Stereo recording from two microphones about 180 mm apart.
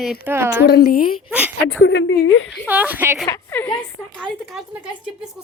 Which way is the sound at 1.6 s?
90° left.